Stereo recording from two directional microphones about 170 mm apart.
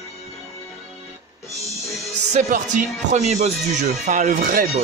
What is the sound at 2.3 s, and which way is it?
Music, 45° right (ahead or behind).